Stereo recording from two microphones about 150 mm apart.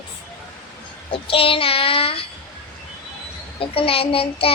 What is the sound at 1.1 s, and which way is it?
Child singing, 40° left (ahead or behind).